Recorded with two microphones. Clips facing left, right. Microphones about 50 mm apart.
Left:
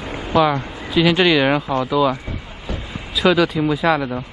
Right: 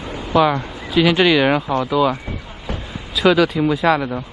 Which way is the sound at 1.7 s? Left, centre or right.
Right.